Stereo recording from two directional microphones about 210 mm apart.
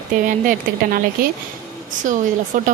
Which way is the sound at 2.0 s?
35° right (ahead or behind).